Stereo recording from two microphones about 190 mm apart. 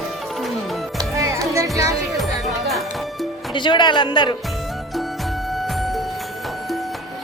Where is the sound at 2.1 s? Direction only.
Centre (ahead or behind).